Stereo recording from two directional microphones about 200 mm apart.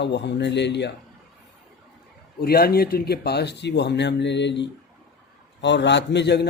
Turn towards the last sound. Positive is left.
turn(degrees=55)  # may be behind; listen again after turning